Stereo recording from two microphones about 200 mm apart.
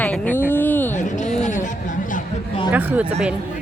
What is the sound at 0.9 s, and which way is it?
Speech, 40° left (ahead or behind).